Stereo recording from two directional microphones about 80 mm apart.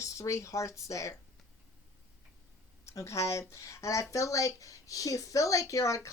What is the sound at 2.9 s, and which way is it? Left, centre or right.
Speech, left.